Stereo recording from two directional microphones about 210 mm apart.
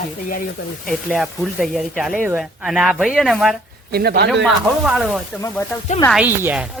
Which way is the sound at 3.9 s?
50° right (ahead or behind).